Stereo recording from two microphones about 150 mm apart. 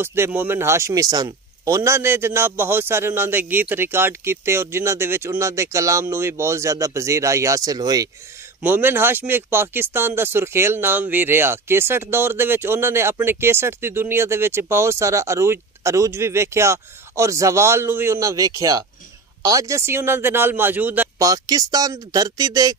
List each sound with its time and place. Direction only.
0.0 s speech: 15° right (ahead or behind)
8.6 s speech: 15° right (ahead or behind)